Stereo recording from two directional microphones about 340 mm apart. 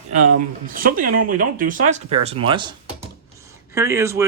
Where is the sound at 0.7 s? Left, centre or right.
Right.